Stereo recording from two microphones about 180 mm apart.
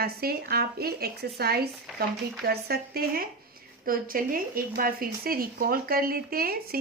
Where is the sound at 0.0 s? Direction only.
60° right (ahead or behind).